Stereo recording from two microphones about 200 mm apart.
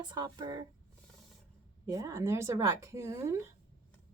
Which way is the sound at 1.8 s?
15° right (ahead or behind).